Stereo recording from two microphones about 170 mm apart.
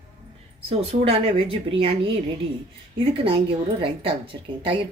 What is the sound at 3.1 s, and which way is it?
A woman's voice, 30° right (ahead or behind).